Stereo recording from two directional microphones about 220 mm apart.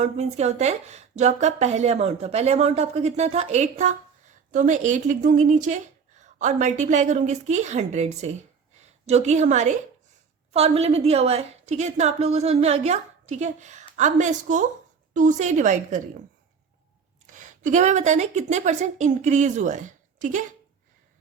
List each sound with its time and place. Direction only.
0.0 s a woman's voice: 30° right (ahead or behind)
17.2 s a woman's voice: 35° right (ahead or behind)